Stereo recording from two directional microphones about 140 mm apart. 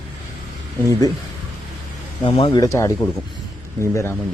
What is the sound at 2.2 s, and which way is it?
Speech, 45° left (ahead or behind).